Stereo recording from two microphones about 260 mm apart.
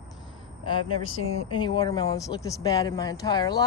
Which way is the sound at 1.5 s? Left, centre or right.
Centre.